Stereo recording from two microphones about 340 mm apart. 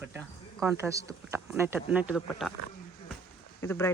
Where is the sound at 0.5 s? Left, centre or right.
Centre.